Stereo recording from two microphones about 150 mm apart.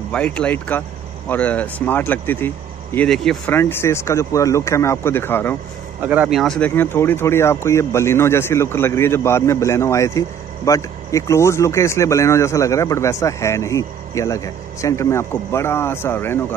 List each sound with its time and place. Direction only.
0.1 s speech: 10° left (ahead or behind)
5.9 s speech: 10° right (ahead or behind)
6.7 s speech: 15° left (ahead or behind)